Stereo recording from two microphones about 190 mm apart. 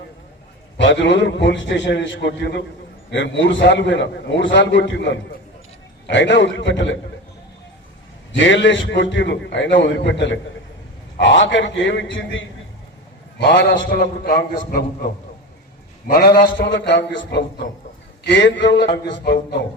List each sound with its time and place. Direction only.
0.8 s a man's voice: 70° left (ahead or behind)
8.3 s a man's voice: 70° left (ahead or behind)
13.4 s a man's voice: 65° left (ahead or behind)